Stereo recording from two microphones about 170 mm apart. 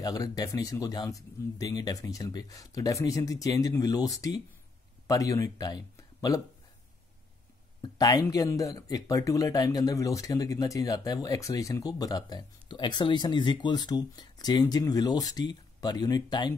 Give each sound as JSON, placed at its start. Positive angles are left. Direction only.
{"t": 0.0, "sound": "speech", "side_deg": 20}
{"t": 7.8, "sound": "speech", "side_deg": 25}